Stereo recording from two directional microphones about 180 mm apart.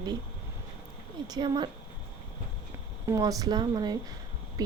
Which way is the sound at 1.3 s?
25° right (ahead or behind).